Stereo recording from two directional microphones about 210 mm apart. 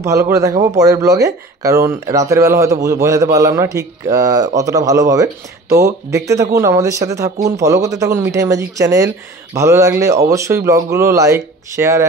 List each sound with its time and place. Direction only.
0.0 s a man's voice: 15° right (ahead or behind)